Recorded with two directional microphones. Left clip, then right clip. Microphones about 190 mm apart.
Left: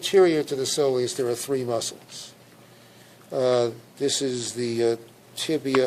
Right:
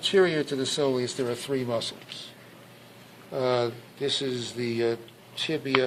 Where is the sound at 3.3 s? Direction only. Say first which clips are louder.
Left 4 dB; 50° left (ahead or behind).